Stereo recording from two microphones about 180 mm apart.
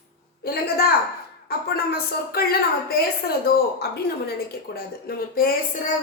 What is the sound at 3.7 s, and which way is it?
A woman's voice, 60° left (ahead or behind).